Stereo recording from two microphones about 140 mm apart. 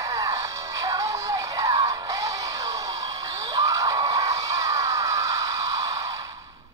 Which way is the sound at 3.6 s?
25° right (ahead or behind).